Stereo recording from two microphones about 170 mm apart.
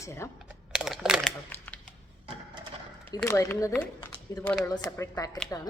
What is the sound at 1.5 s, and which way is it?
Shuffling cards, 10° left (ahead or behind).